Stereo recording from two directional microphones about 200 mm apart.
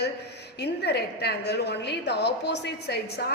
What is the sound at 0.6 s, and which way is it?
A woman's voice, 55° left (ahead or behind).